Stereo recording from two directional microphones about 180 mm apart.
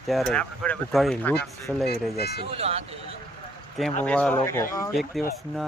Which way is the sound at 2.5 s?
35° right (ahead or behind).